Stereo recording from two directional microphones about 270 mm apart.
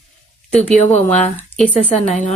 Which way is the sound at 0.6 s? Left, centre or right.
Left.